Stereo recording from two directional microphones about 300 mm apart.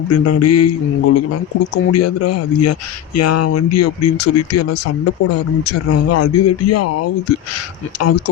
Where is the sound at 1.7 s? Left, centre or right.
Left.